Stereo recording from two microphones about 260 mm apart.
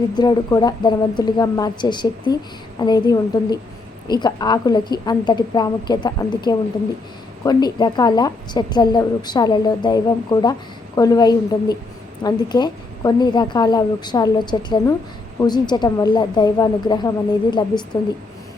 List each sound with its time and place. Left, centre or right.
0.2 s a woman's voice: centre